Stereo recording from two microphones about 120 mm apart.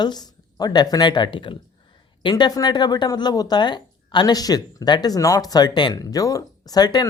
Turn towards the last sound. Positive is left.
turn(degrees=35)  # may be behind; listen again after turning